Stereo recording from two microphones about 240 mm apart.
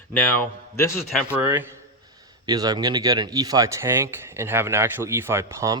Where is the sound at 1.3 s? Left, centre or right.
Centre.